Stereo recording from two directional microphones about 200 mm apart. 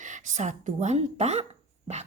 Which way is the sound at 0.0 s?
40° right (ahead or behind).